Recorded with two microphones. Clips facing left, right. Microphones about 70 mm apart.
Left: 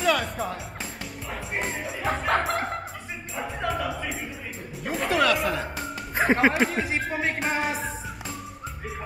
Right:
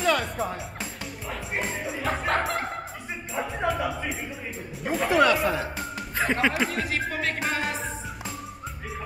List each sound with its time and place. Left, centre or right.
0.0 s speech: centre
1.7 s music: centre
3.3 s speech: centre
6.1 s speech: left
6.7 s speech: centre
7.1 s music: centre
7.4 s music: centre